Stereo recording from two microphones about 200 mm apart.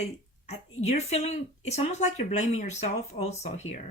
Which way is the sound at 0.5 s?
35° left (ahead or behind).